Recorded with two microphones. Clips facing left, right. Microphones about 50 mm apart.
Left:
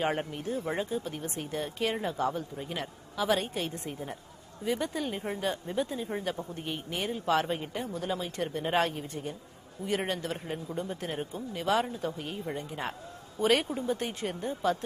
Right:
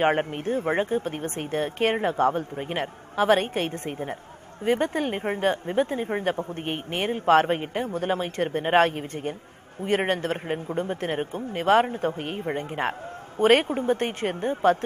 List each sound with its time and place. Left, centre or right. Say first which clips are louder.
0.0 s speech: right 8 dB; right